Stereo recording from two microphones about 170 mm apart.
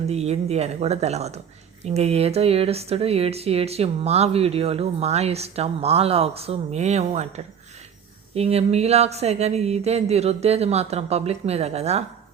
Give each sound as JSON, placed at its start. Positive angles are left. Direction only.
{"t": 0.1, "sound": "speech", "side_deg": -40}